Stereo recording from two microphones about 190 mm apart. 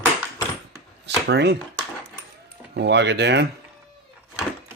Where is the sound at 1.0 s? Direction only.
60° right (ahead or behind).